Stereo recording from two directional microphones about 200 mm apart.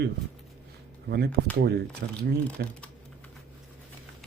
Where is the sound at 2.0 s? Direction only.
50° right (ahead or behind).